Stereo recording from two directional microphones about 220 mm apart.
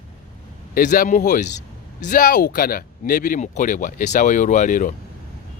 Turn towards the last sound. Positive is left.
turn(degrees=35)  # may be behind; listen again after turning